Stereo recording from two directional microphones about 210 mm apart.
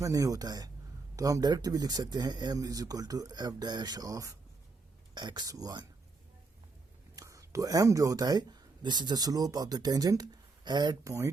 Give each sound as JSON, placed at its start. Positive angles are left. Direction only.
{"t": 0.0, "sound": "speech", "side_deg": -15}
{"t": 7.2, "sound": "speech", "side_deg": -15}